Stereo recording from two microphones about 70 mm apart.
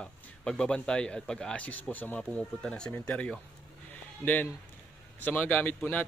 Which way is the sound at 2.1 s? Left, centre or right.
Centre.